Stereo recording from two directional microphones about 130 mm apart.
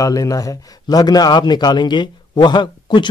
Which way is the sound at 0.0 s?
25° left (ahead or behind).